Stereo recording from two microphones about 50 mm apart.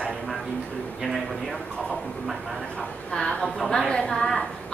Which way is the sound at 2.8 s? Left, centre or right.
Centre.